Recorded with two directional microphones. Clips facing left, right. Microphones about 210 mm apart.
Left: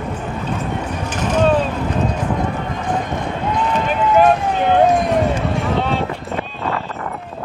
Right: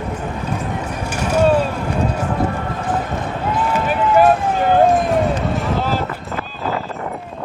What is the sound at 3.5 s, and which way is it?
Run, 5° right (ahead or behind).